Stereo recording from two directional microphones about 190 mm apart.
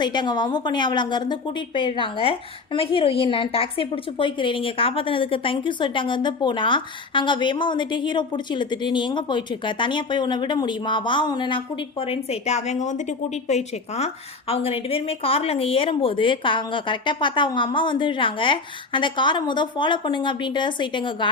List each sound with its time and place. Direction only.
0.0 s a woman's voice: 25° left (ahead or behind)